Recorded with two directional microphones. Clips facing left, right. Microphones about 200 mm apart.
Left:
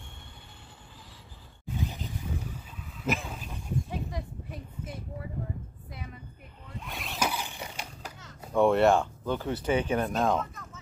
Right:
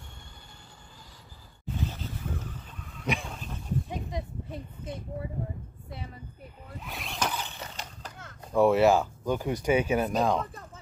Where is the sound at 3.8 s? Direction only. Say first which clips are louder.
Right 1 dB; 20° right (ahead or behind).